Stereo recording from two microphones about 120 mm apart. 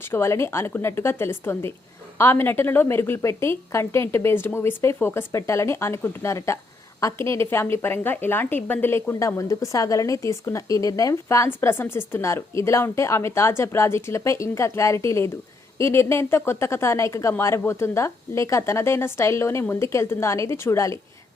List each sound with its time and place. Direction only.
0.0 s a woman's voice: 20° left (ahead or behind)